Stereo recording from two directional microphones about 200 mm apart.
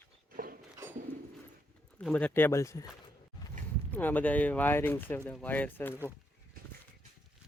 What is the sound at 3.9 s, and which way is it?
Speech, 10° left (ahead or behind).